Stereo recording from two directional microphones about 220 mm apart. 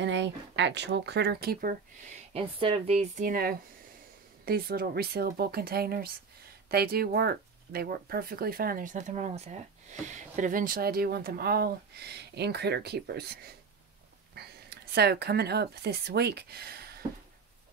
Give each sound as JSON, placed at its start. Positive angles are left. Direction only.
{"t": 0.0, "sound": "speech", "side_deg": -55}
{"t": 2.3, "sound": "speech", "side_deg": -30}